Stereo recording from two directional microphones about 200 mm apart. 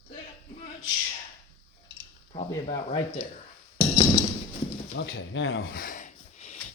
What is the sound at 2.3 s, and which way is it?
Speech, 25° left (ahead or behind).